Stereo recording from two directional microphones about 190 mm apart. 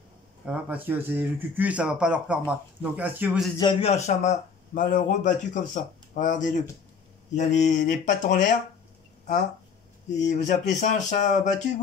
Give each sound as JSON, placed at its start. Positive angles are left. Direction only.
{"t": 0.5, "sound": "speech", "side_deg": -10}
{"t": 3.8, "sound": "speech", "side_deg": 35}